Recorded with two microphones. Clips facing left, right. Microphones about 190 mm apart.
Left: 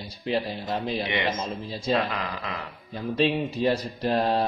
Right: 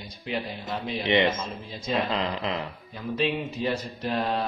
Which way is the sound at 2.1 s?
25° right (ahead or behind).